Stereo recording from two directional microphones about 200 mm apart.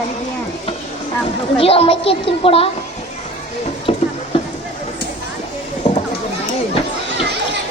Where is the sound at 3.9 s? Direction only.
30° left (ahead or behind).